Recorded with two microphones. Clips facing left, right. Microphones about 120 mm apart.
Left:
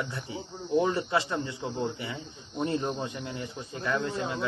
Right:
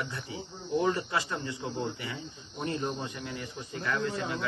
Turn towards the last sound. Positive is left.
turn(degrees=25)  # may be behind; listen again after turning